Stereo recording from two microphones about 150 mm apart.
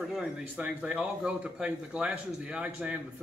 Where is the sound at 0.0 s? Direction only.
5° right (ahead or behind).